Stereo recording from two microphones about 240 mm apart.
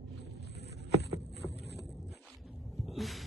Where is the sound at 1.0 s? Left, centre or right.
Left.